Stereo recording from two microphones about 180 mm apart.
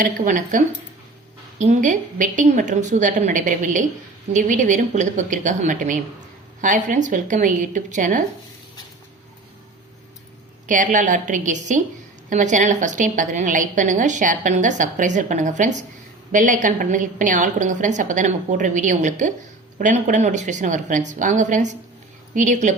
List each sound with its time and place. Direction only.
0.0 s a woman's voice: 45° right (ahead or behind)
10.7 s a woman's voice: 45° right (ahead or behind)